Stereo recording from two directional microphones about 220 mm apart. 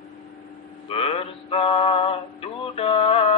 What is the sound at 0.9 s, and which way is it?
Music, 25° left (ahead or behind).